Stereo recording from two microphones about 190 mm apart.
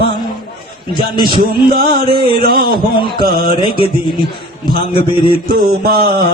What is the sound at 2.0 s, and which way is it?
Speech, 55° right (ahead or behind).